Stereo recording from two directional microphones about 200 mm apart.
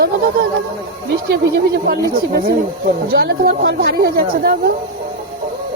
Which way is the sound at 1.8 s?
50° right (ahead or behind).